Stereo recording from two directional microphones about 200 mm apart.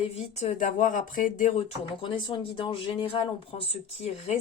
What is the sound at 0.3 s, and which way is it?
Speech, 40° left (ahead or behind).